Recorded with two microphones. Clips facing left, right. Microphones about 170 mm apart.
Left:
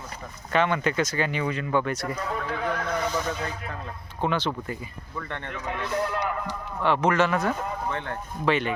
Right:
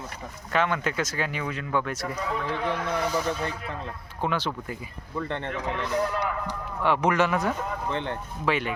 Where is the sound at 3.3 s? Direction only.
30° right (ahead or behind).